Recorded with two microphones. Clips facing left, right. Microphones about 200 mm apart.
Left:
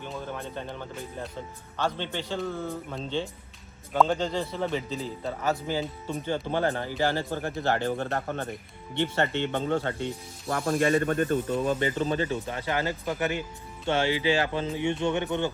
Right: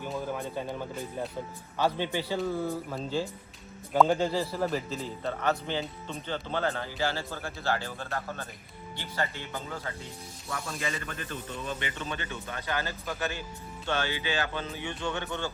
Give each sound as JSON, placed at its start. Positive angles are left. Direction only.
{"t": 0.0, "sound": "a man's voice", "side_deg": -5}
{"t": 7.8, "sound": "speech", "side_deg": 55}
{"t": 9.2, "sound": "speech", "side_deg": 70}